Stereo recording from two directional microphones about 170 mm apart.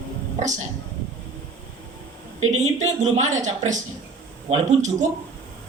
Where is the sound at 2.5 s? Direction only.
45° right (ahead or behind).